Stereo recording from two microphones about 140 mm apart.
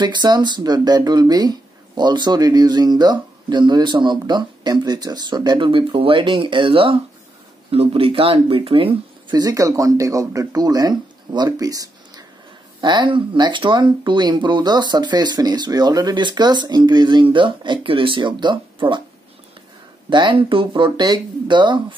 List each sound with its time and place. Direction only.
0.0 s speech: 30° right (ahead or behind)
9.3 s speech: 25° right (ahead or behind)
20.1 s speech: 35° right (ahead or behind)